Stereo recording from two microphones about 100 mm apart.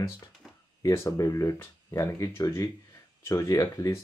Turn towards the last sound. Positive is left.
turn(degrees=35)  # may be behind; listen again after turning